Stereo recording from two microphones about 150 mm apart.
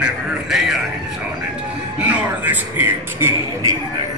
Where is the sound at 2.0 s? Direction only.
10° right (ahead or behind).